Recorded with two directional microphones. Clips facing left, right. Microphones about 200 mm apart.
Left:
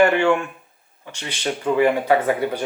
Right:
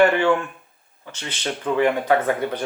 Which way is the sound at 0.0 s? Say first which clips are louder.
Left 1 dB; 10° left (ahead or behind).